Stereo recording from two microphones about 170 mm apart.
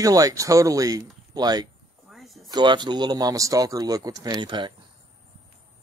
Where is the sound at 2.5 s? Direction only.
25° right (ahead or behind).